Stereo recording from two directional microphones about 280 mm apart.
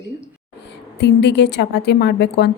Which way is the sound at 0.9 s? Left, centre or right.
Left.